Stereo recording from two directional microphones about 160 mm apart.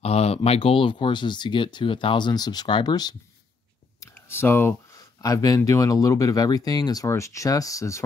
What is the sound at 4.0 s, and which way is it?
Speech, 15° left (ahead or behind).